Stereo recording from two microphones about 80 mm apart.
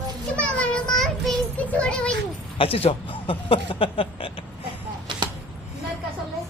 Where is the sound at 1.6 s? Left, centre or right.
Centre.